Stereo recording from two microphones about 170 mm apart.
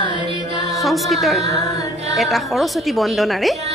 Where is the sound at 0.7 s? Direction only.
Centre (ahead or behind).